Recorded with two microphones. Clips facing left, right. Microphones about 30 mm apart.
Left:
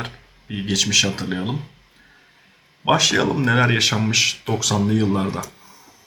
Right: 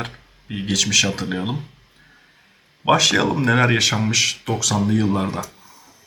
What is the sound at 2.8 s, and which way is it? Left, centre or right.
Speech, centre.